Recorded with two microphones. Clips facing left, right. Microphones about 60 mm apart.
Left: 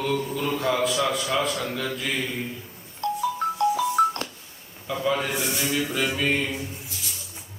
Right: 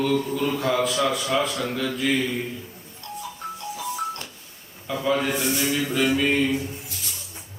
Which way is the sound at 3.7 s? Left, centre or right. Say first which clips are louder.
Left 8 dB; left.